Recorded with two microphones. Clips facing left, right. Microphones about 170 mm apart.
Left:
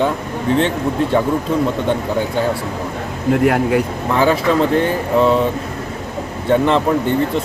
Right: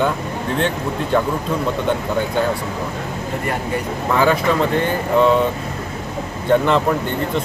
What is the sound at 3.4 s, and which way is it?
Speech, 70° left (ahead or behind).